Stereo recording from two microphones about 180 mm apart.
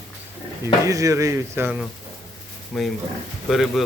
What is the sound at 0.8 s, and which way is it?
Speech, 20° right (ahead or behind).